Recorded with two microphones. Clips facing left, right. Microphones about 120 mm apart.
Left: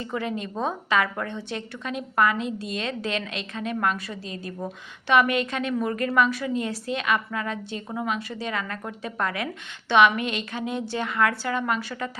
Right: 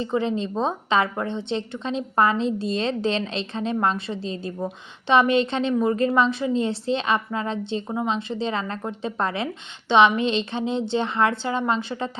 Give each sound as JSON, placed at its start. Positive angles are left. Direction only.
{"t": 0.0, "sound": "a woman's voice", "side_deg": -25}